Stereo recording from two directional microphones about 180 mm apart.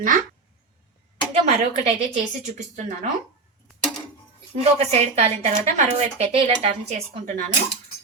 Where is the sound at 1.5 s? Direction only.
35° right (ahead or behind).